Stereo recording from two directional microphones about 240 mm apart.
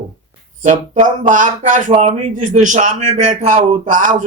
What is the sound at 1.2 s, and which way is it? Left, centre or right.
Speech, right.